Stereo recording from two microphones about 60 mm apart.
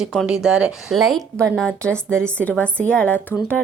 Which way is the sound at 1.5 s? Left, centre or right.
Centre.